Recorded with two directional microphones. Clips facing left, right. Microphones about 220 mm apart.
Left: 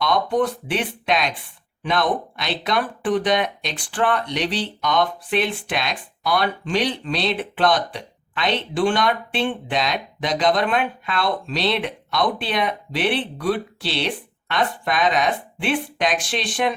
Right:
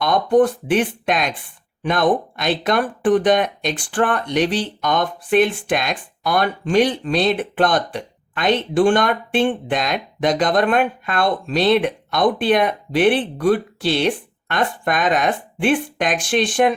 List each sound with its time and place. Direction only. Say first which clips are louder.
0.0 s speech: right 5 dB; 50° right (ahead or behind)